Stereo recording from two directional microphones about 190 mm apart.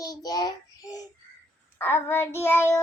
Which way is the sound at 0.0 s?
20° left (ahead or behind).